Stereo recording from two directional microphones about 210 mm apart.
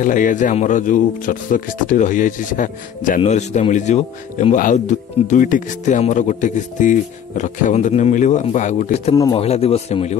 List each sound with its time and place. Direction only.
0.0 s speech: 40° left (ahead or behind)
9.1 s a man's voice: 15° left (ahead or behind)
9.4 s a man's voice: 30° left (ahead or behind)